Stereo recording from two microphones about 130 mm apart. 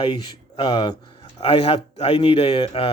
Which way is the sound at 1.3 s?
50° left (ahead or behind).